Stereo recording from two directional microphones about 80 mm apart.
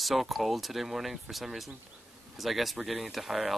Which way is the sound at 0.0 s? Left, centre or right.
Centre.